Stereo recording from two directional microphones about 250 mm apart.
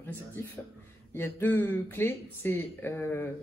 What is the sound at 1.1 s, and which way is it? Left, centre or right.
Speech, centre.